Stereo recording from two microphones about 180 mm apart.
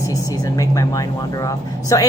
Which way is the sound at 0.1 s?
20° left (ahead or behind).